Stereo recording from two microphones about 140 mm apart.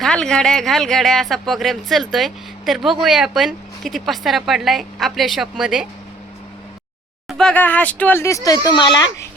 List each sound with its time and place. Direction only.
0.0 s speech: 5° left (ahead or behind)
7.3 s speech: 5° left (ahead or behind); by 9.0 s 35° left (ahead or behind)